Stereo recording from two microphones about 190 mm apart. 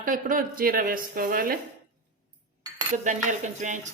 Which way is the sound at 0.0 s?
45° right (ahead or behind).